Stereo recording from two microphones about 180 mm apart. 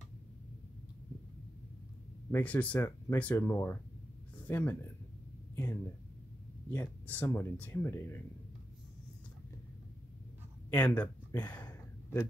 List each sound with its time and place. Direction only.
2.3 s speech: 10° left (ahead or behind)
6.7 s speech: 10° left (ahead or behind)
10.7 s speech: 10° left (ahead or behind)
11.5 s a sound: 20° left (ahead or behind)